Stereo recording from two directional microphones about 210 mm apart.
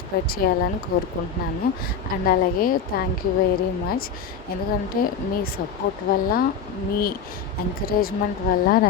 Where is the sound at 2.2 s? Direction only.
45° left (ahead or behind).